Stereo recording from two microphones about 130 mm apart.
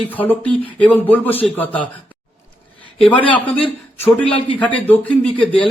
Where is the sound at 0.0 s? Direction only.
15° left (ahead or behind).